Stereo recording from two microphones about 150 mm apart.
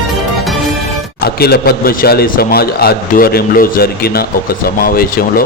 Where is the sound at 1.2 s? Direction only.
90° left.